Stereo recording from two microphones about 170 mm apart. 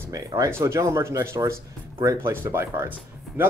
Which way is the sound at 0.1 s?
20° right (ahead or behind).